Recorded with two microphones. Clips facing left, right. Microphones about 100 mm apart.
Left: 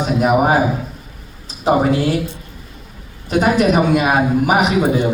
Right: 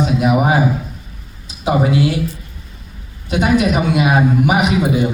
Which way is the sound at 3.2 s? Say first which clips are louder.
Left 1 dB; 40° left (ahead or behind).